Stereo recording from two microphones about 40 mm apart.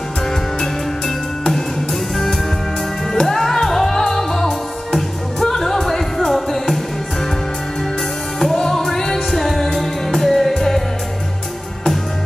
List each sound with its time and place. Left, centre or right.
0.6 s music: centre
3.2 s music: centre
8.4 s music: centre